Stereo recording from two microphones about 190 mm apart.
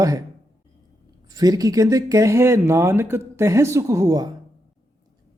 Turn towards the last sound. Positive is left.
turn(degrees=-20)  # may be behind; listen again after turning